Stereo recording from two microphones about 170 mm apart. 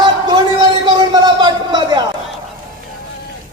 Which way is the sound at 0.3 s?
25° right (ahead or behind).